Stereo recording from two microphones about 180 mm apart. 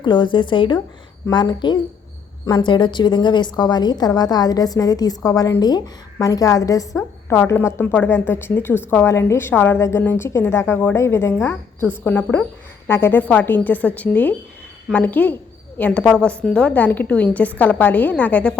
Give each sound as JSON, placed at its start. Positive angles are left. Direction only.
{"t": 0.0, "sound": "a woman's voice", "side_deg": 25}